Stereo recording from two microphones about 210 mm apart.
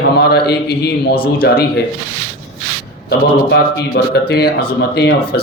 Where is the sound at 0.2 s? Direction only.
50° left (ahead or behind).